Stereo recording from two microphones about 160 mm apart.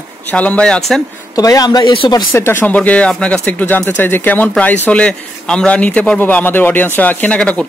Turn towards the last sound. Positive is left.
turn(degrees=5)  # may be behind; listen again after turning